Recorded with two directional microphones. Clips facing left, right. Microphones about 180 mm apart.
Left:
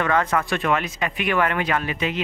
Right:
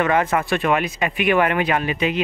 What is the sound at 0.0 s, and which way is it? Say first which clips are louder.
Speech: right 2 dB; 15° right (ahead or behind).